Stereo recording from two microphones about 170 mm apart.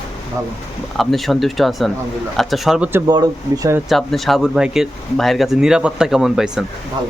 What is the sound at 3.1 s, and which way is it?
Speech, 20° right (ahead or behind).